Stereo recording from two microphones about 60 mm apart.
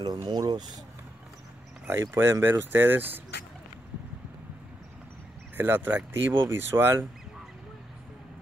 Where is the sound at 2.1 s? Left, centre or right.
Right.